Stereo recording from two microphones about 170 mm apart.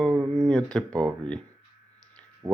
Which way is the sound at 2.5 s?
20° right (ahead or behind).